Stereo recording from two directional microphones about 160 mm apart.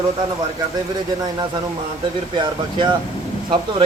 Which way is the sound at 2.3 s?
30° right (ahead or behind).